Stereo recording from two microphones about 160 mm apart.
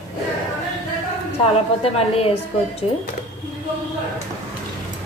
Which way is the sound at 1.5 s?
40° left (ahead or behind).